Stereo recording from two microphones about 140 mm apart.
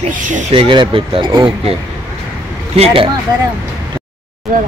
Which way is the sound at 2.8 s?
40° right (ahead or behind).